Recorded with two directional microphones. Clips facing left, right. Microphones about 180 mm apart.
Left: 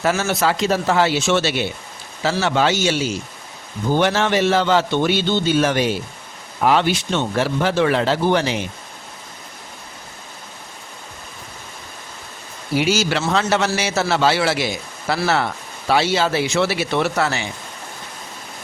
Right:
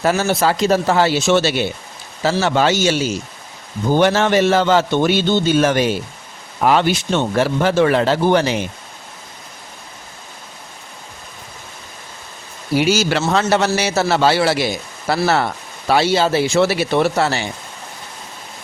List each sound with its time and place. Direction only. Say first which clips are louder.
0.0 s a man's voice: right 3 dB; 35° right (ahead or behind)
12.8 s a man's voice: right 3 dB; 40° right (ahead or behind)